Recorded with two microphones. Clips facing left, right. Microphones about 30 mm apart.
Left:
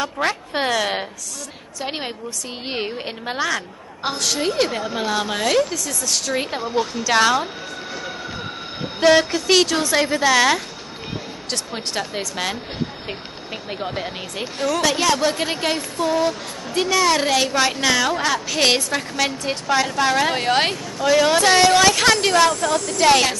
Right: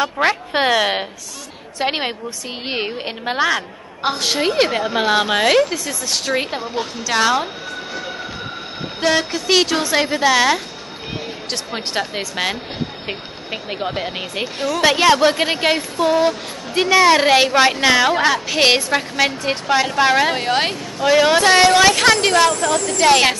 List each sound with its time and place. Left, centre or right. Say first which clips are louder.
0.0 s a woman's voice: right 5 dB; right
2.7 s a woman's voice: right 3 dB; centre
7.0 s speech: even; centre
9.0 s a woman's voice: left 3 dB; centre
11.5 s a woman's voice: right 2 dB; centre
20.2 s speech: right 1 dB; centre
21.0 s a woman's voice: right 3 dB; centre